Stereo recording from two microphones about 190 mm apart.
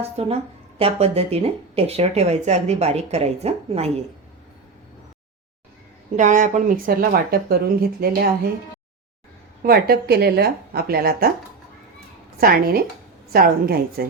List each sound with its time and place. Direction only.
0.0 s speech: 30° right (ahead or behind)
6.1 s speech: 40° right (ahead or behind)
9.6 s a woman's voice: 55° right (ahead or behind)
12.4 s speech: 50° right (ahead or behind)